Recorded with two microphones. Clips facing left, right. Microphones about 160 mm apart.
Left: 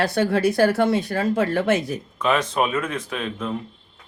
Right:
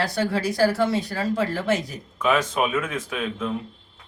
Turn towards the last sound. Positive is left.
turn(degrees=0)  # may be behind; listen again after turning